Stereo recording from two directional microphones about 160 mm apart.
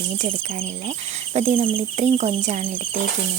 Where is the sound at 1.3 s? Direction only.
40° right (ahead or behind).